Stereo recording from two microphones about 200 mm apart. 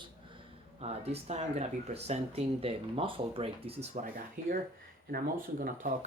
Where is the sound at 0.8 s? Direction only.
30° right (ahead or behind).